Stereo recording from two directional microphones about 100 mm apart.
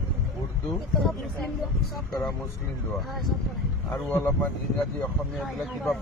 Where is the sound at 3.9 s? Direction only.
20° left (ahead or behind).